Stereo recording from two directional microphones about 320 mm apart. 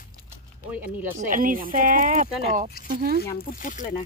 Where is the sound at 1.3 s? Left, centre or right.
Right.